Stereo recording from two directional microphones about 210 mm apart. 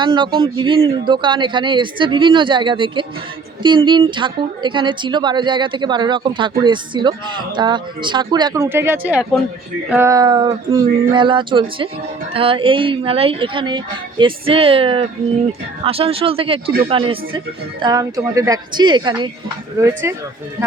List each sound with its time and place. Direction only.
0.0 s speech: 20° right (ahead or behind)